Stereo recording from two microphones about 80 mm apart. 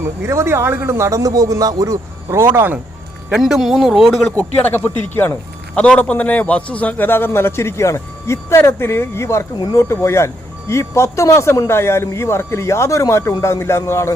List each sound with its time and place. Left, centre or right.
0.0 s a man's voice: right
3.3 s speech: centre
4.7 s speech: left
5.7 s speech: centre; by 14.1 s left